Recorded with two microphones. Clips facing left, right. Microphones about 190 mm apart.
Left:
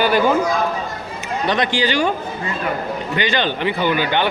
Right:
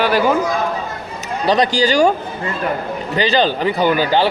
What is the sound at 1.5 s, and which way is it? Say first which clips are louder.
Speech: right 5 dB; 40° right (ahead or behind).